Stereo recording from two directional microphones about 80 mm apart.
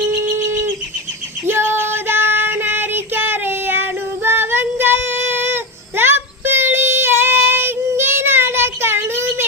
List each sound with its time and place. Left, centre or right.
1.5 s child singing: right